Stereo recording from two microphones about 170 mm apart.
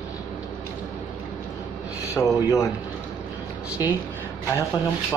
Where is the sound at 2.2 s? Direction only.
15° left (ahead or behind).